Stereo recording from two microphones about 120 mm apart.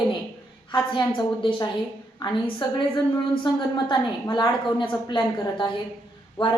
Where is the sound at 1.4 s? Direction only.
45° left (ahead or behind).